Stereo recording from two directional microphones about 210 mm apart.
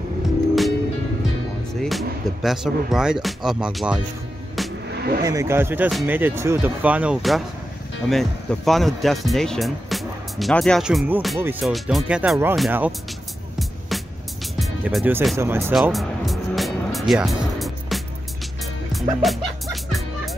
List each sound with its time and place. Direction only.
1.8 s speech: centre (ahead or behind)
4.6 s vehicle: centre (ahead or behind)
4.9 s vehicle: 50° right (ahead or behind)
5.2 s speech: 15° right (ahead or behind)
13.6 s music: centre (ahead or behind)
15.3 s speech: 10° right (ahead or behind)
15.7 s music: centre (ahead or behind)